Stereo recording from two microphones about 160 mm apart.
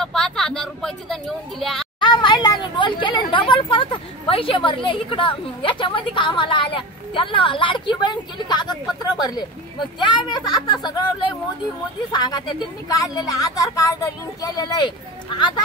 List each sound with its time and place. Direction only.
0.0 s speech: 5° left (ahead or behind)
2.0 s a woman's voice: 25° left (ahead or behind)